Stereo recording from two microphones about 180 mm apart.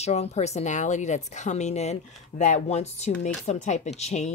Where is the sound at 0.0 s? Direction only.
35° left (ahead or behind).